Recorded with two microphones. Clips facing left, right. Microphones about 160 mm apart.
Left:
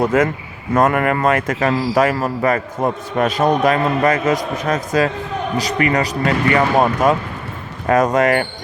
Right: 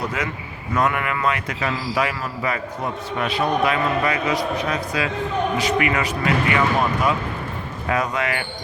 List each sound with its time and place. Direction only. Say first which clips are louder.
0.0 s a man's voice: left 11 dB; 50° left (ahead or behind)